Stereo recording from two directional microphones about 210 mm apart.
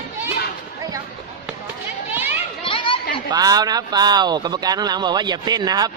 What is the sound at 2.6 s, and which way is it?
Chatter, 25° left (ahead or behind).